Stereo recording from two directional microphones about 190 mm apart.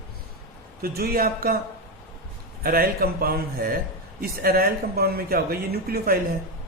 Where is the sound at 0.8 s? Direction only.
50° right (ahead or behind).